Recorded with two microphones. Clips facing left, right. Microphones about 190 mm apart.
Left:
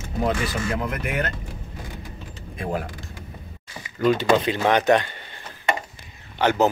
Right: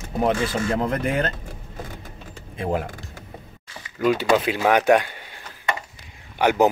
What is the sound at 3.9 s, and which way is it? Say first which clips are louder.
Speech: even; 5° right (ahead or behind).